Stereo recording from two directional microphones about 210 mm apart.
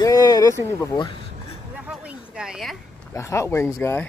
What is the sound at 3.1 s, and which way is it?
Speech, 15° left (ahead or behind).